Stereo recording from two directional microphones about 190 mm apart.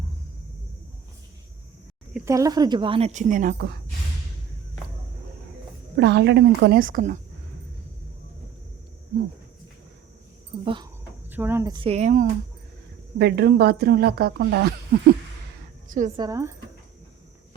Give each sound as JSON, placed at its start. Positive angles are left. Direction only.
{"t": 2.1, "sound": "a woman's voice", "side_deg": -15}
{"t": 6.0, "sound": "speech", "side_deg": -65}
{"t": 10.5, "sound": "a sound", "side_deg": -20}
{"t": 11.3, "sound": "a woman's voice", "side_deg": -10}
{"t": 13.1, "sound": "speech", "side_deg": -55}
{"t": 15.9, "sound": "a woman's voice", "side_deg": -40}
{"t": 16.1, "sound": "speech", "side_deg": -20}